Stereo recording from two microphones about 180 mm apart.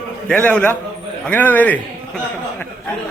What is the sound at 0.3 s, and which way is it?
A man's voice, 5° left (ahead or behind).